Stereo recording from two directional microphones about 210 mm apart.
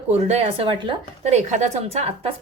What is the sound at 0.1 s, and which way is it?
Speech, 30° right (ahead or behind).